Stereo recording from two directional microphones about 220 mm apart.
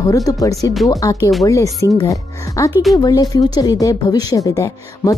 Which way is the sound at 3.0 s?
15° left (ahead or behind).